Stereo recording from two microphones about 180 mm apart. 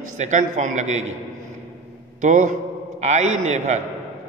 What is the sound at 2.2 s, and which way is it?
Speech, 45° right (ahead or behind).